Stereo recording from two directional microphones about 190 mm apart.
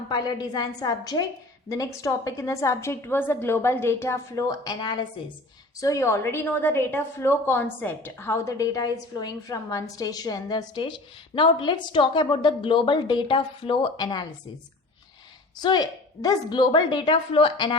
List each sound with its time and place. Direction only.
0.1 s a woman's voice: 20° left (ahead or behind)
15.5 s a woman's voice: 20° left (ahead or behind)